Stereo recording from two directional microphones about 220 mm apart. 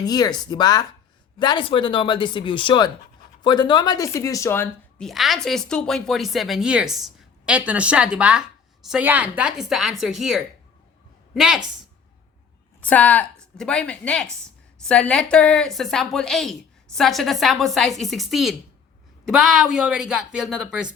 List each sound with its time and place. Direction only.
0.0 s a woman's voice: 15° left (ahead or behind); by 11.6 s centre (ahead or behind)
12.8 s a woman's voice: 5° left (ahead or behind)